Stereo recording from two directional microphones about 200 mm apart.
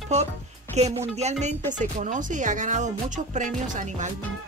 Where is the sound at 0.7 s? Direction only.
30° right (ahead or behind).